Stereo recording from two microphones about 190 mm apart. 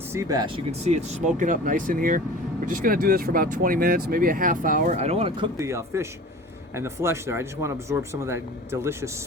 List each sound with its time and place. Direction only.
0.1 s speech: 15° right (ahead or behind)
5.5 s speech: 15° right (ahead or behind)